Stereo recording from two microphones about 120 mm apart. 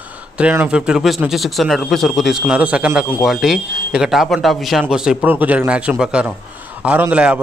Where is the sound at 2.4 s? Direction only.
10° right (ahead or behind).